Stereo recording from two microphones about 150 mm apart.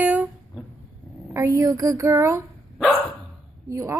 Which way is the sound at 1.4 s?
20° right (ahead or behind).